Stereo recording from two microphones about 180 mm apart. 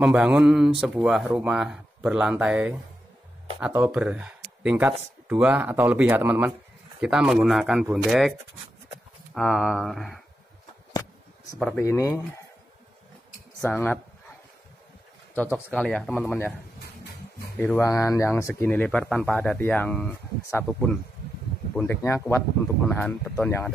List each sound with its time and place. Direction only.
0.0 s speech: 5° right (ahead or behind)
11.5 s speech: centre (ahead or behind)
11.8 s speech: 15° left (ahead or behind)
13.7 s speech: 10° left (ahead or behind)
15.3 s speech: 10° left (ahead or behind)
17.6 s speech: 10° left (ahead or behind)